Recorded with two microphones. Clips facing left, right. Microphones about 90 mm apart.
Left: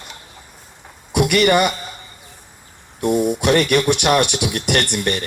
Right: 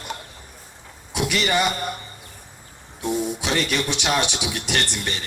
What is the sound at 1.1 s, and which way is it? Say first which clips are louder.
Speech: left 7 dB; 60° left (ahead or behind).